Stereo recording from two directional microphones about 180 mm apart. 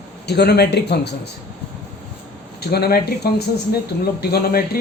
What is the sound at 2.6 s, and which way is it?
A man's voice, 60° left (ahead or behind).